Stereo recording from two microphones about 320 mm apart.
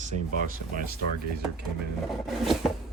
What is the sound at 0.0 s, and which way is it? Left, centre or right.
Speech, right.